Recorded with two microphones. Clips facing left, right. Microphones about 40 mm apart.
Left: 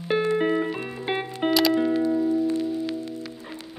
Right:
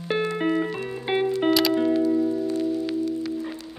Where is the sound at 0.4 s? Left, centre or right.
Centre.